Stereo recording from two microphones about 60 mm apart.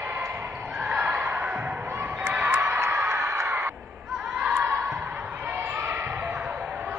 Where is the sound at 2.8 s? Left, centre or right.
Right.